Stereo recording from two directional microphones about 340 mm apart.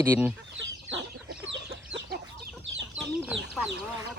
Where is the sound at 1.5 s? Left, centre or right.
Right.